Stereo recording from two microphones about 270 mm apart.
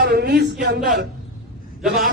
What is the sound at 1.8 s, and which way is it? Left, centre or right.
Speech, centre.